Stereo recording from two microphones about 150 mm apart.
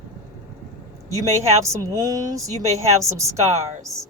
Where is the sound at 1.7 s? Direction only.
20° right (ahead or behind).